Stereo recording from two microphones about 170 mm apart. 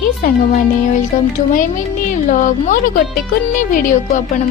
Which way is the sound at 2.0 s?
50° left (ahead or behind).